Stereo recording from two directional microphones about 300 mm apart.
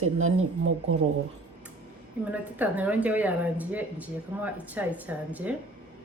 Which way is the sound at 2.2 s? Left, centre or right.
Centre.